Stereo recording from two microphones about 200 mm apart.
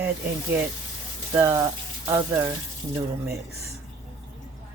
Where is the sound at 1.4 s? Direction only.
15° right (ahead or behind).